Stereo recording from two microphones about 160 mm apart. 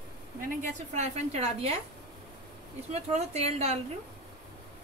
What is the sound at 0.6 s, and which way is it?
A woman's voice, 45° right (ahead or behind).